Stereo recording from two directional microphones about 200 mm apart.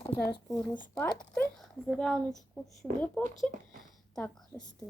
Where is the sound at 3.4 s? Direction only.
Centre (ahead or behind).